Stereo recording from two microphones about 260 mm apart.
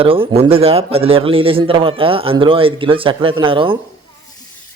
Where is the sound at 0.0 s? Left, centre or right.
Right.